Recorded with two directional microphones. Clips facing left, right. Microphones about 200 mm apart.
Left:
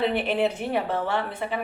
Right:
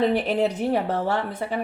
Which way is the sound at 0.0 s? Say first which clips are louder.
Right 2 dB; 40° right (ahead or behind).